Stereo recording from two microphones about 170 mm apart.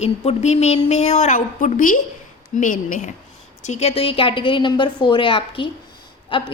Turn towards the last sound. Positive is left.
turn(degrees=30)  # may be behind; listen again after turning